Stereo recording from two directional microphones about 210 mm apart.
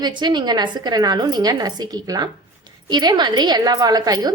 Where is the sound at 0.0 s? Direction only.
20° right (ahead or behind).